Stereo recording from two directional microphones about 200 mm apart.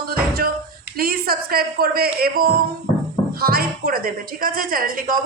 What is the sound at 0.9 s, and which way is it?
A woman's voice, 50° right (ahead or behind).